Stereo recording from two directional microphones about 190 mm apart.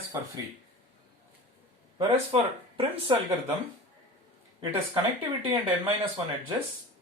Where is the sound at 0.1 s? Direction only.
15° right (ahead or behind).